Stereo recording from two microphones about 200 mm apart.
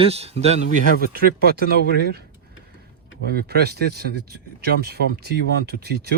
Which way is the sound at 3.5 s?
55° right (ahead or behind).